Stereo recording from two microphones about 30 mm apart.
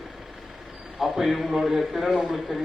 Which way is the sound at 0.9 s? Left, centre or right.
Centre.